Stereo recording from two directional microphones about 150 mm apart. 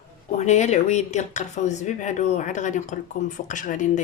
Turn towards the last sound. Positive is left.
turn(degrees=55)  # may be behind; listen again after turning